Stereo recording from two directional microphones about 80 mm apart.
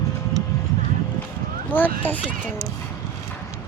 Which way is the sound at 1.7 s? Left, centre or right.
Left.